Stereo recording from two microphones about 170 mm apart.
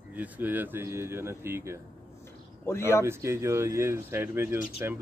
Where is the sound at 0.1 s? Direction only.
10° right (ahead or behind).